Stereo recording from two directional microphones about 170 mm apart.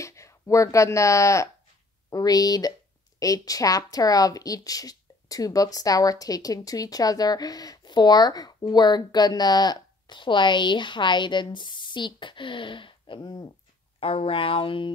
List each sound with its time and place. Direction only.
0.0 s speech: 15° left (ahead or behind)